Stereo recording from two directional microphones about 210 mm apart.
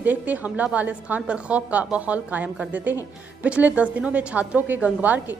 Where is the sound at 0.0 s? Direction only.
10° right (ahead or behind).